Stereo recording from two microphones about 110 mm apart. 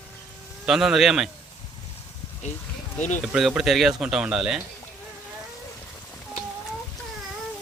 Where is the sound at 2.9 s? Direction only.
90° left.